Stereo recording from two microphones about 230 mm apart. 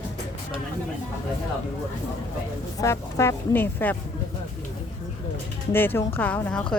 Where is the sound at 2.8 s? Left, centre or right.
Centre.